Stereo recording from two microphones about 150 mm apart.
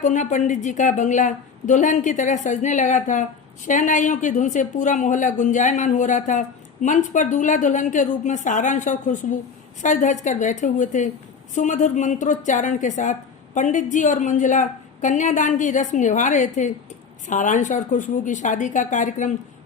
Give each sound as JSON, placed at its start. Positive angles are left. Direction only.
{"t": 0.0, "sound": "a woman's voice", "side_deg": 55}